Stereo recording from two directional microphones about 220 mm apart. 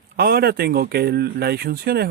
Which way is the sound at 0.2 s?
45° right (ahead or behind).